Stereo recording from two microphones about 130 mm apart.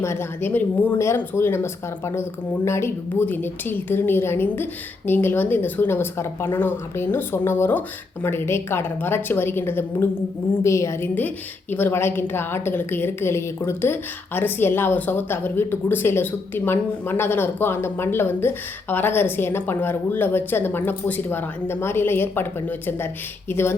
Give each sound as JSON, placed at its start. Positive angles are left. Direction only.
{"t": 0.0, "sound": "a woman's voice", "side_deg": 20}